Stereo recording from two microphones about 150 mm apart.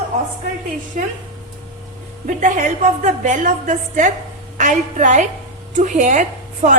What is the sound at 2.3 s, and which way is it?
A woman's voice, 60° right (ahead or behind).